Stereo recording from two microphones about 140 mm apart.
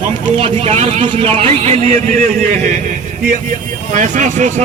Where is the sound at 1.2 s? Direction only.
45° right (ahead or behind).